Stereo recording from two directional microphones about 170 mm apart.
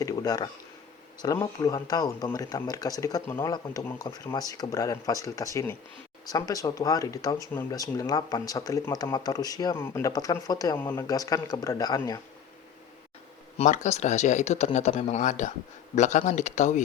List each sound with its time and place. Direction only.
0.0 s a sound: 20° left (ahead or behind)
1.2 s speech: 20° left (ahead or behind)
13.6 s speech: 40° left (ahead or behind)